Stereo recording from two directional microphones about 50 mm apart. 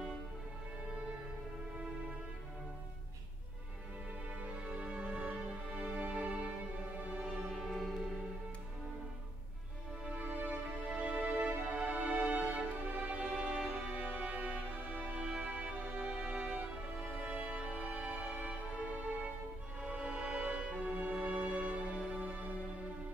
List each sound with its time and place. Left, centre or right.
4.6 s music: right
5.8 s music: centre
7.2 s music: centre
10.0 s music: right
10.9 s music: centre
11.3 s music: right
15.2 s music: centre
15.5 s music: right